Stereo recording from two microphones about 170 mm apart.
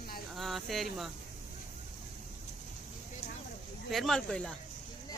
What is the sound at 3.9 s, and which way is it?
Speech, centre (ahead or behind).